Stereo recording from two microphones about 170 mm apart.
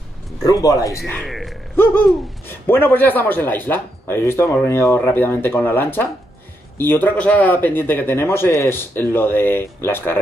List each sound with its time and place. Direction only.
0.4 s speech: 20° left (ahead or behind)
1.0 s speech: 5° left (ahead or behind)
2.6 s speech: 10° left (ahead or behind)